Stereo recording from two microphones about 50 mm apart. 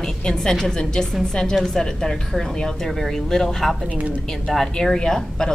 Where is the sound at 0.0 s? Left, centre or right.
Centre.